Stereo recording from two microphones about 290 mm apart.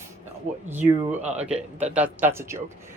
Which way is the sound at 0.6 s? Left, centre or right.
Centre.